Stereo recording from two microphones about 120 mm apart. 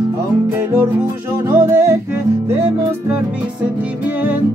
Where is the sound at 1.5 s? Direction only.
20° right (ahead or behind).